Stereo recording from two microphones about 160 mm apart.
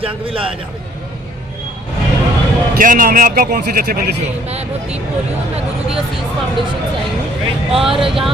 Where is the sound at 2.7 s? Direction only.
60° right (ahead or behind); by 4.2 s 80° right.